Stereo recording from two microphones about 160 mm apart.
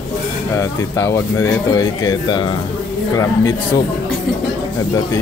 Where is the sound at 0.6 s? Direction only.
15° left (ahead or behind).